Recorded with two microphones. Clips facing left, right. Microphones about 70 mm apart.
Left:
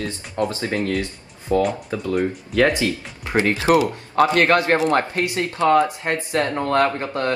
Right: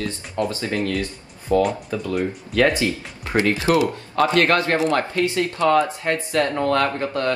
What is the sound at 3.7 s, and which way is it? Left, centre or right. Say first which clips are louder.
Speech: left 2 dB; left.